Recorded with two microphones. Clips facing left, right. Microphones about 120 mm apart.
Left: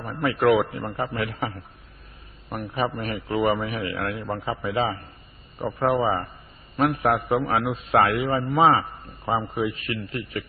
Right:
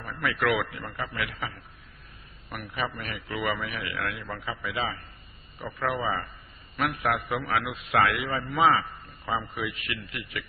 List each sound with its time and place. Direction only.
0.0 s a man's voice: 30° left (ahead or behind)